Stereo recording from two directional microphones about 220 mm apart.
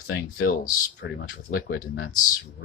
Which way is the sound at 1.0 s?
50° left (ahead or behind).